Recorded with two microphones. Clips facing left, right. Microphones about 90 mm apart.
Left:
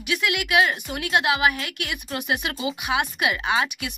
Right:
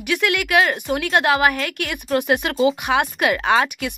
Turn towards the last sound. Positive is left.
turn(degrees=-45)  # may be behind; listen again after turning